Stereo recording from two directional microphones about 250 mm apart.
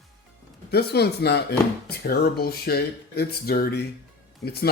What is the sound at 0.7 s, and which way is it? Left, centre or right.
Speech, left.